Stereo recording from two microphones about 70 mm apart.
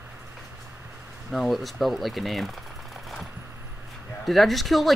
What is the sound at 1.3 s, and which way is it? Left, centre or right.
Speech, centre.